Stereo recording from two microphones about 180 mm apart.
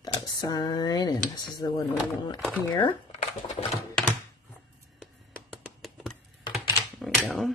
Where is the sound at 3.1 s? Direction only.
35° left (ahead or behind).